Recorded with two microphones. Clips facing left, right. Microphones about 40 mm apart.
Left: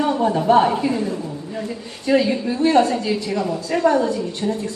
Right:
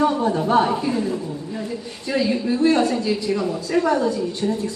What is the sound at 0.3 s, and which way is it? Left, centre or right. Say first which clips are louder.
Speech: left 3 dB; left.